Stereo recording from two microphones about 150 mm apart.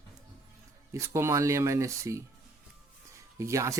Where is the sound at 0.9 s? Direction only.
20° right (ahead or behind).